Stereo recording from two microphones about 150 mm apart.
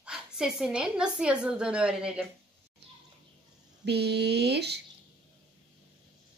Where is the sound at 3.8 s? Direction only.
90° right.